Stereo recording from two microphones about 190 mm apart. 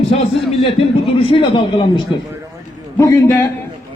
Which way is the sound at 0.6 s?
30° left (ahead or behind).